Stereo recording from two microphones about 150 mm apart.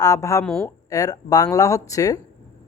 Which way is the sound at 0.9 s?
25° left (ahead or behind).